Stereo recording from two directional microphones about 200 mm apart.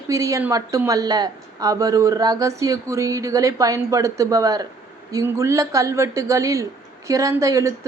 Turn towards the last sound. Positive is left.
turn(degrees=-15)  # may be behind; listen again after turning